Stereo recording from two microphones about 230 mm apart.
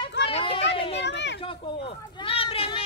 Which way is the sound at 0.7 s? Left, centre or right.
Left.